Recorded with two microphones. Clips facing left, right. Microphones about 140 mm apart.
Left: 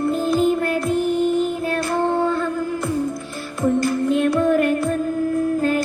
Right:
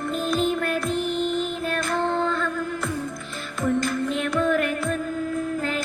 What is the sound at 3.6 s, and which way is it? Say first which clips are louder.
Music: left 5 dB; 15° left (ahead or behind).